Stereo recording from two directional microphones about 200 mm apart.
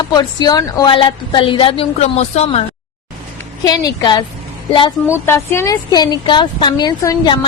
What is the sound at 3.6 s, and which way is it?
Speech, 20° left (ahead or behind).